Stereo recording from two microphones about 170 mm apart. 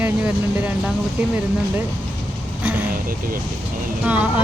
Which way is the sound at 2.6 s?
10° right (ahead or behind).